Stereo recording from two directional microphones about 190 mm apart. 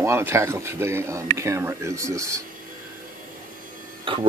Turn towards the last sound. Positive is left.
turn(degrees=-25)  # may be behind; listen again after turning